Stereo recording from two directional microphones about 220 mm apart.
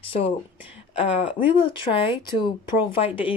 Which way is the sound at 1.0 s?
25° left (ahead or behind).